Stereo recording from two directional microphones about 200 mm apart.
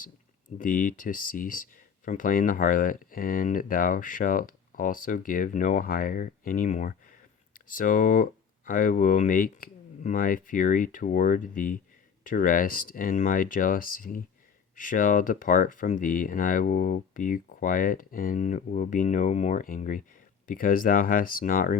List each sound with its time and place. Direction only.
0.6 s speech: 40° left (ahead or behind)